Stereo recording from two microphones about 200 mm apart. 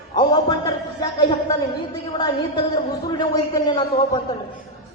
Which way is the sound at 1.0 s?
25° left (ahead or behind).